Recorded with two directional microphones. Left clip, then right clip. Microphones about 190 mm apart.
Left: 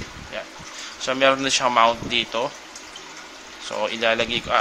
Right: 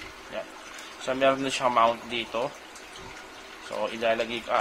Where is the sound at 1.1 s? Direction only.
5° left (ahead or behind).